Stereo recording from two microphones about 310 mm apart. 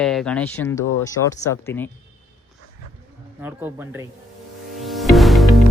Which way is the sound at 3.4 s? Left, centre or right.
Centre.